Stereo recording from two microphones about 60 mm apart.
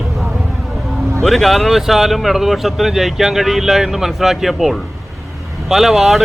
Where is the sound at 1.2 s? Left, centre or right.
Centre.